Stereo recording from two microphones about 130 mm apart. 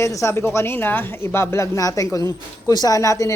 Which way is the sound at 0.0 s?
25° left (ahead or behind).